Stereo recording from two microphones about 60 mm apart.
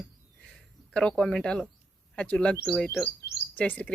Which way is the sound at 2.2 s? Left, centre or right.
Centre.